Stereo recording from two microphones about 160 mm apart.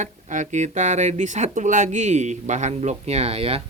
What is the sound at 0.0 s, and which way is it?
Speech, 50° right (ahead or behind).